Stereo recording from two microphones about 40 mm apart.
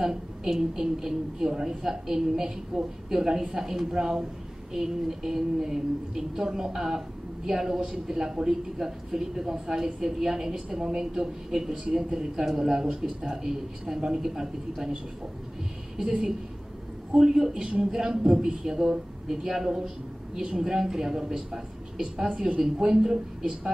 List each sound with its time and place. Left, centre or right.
0.0 s a woman's voice: centre
17.1 s a woman's voice: centre
17.9 s a woman's voice: centre